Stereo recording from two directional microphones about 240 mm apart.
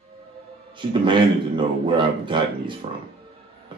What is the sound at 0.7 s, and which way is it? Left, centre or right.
A man's voice, centre.